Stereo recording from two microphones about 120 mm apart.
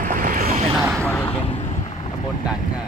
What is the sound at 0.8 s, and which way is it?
Speech, 25° right (ahead or behind).